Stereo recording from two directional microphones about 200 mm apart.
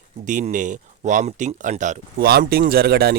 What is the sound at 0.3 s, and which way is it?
Speech, 40° right (ahead or behind).